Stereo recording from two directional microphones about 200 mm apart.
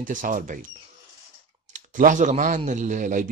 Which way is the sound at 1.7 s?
40° right (ahead or behind).